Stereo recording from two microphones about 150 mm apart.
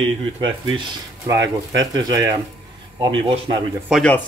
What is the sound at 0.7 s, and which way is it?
Speech, 25° right (ahead or behind).